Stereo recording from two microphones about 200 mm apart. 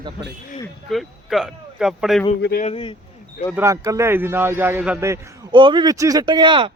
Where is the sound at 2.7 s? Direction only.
25° left (ahead or behind).